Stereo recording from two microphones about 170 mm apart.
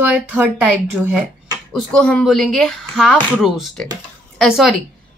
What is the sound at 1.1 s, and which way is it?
Speech, centre (ahead or behind).